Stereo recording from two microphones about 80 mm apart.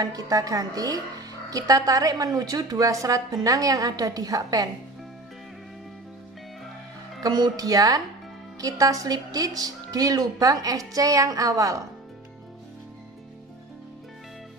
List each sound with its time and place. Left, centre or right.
0.0 s a woman's voice: right
7.2 s a woman's voice: right